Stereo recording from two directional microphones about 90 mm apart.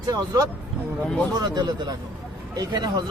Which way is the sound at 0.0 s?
40° right (ahead or behind).